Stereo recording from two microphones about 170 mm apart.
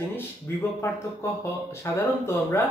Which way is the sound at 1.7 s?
15° left (ahead or behind).